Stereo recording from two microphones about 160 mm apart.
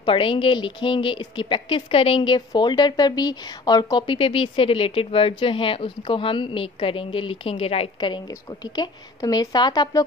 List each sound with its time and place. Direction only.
0.0 s a woman's voice: 35° left (ahead or behind)